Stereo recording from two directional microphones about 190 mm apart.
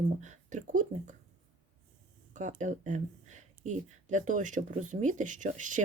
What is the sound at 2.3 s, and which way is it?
Speech, 40° right (ahead or behind).